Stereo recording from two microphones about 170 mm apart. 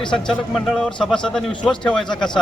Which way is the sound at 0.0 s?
5° left (ahead or behind).